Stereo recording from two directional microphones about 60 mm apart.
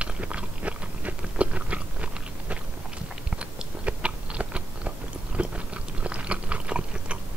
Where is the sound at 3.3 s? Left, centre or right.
Centre.